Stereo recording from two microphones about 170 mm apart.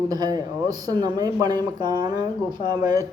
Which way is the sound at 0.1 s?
20° right (ahead or behind).